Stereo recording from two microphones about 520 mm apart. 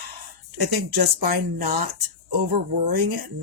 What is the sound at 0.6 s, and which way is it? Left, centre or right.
Speech, right.